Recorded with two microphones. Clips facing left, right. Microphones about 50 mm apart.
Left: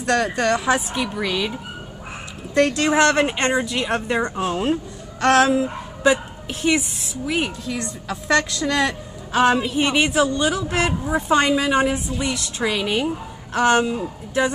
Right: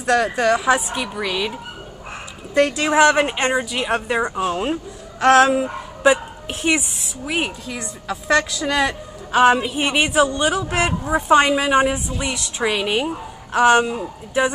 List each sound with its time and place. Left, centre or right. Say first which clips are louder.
0.0 s a woman's voice: right 2 dB; centre
5.5 s a woman's voice: even; right